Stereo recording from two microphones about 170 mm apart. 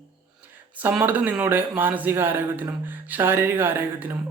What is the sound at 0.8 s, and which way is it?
Speech, 10° right (ahead or behind).